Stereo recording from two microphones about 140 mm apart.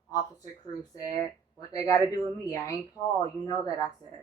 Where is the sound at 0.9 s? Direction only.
25° left (ahead or behind).